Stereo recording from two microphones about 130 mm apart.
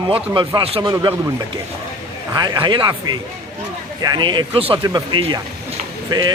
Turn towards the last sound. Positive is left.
turn(degrees=-35)  # may be behind; listen again after turning